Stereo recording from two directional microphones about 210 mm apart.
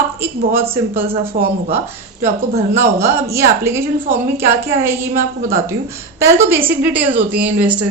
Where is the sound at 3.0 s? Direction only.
15° right (ahead or behind).